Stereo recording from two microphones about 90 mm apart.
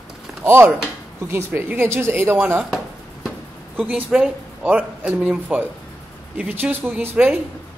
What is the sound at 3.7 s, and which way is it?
Speech, 20° right (ahead or behind).